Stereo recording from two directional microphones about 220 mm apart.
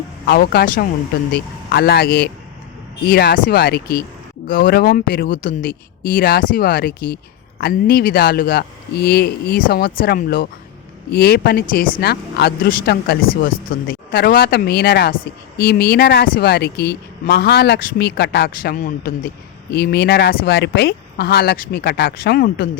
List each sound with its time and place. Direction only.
0.3 s speech: 45° left (ahead or behind)